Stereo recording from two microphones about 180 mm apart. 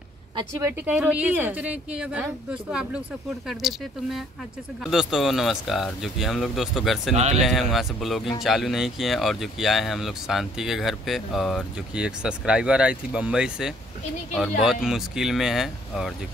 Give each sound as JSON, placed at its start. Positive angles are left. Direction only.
{"t": 0.4, "sound": "a woman's voice", "side_deg": -15}